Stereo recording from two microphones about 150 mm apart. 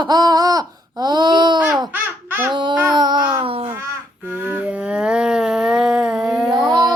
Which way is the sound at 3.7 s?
15° right (ahead or behind).